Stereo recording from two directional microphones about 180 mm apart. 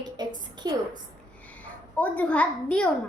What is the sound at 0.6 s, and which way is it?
Speech, 20° right (ahead or behind).